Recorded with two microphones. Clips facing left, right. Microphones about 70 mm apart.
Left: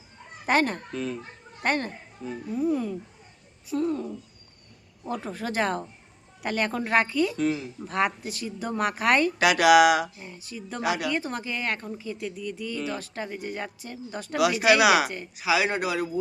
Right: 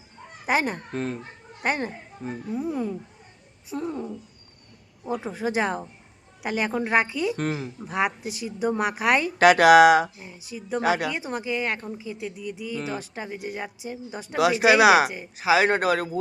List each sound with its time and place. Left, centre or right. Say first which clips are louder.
0.4 s speech: left 1 dB; centre
0.9 s speech: right 3 dB; right
1.6 s speech: even; centre
7.3 s speech: left 2 dB; right
7.8 s speech: even; centre
9.4 s speech: right 5 dB; right
10.2 s speech: right 1 dB; centre
10.8 s speech: right 4 dB; right
11.1 s speech: right 1 dB; centre
14.3 s speech: right 2 dB; right